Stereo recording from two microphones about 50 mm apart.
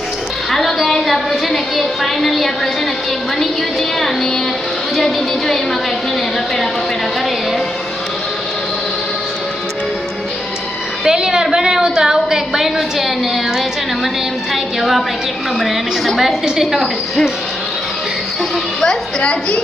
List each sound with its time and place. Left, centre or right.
0.5 s a sound: centre
4.9 s a woman's voice: centre
11.0 s a sound: centre
11.5 s a woman's voice: centre
14.5 s a woman's voice: centre
19.2 s a woman's voice: left